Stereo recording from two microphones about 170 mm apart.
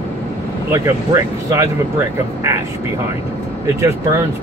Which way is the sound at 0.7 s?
20° right (ahead or behind).